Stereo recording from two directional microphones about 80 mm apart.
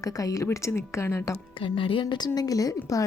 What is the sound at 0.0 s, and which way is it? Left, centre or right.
A woman's voice, left.